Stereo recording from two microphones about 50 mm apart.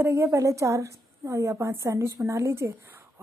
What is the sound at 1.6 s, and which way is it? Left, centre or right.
A woman's voice, right.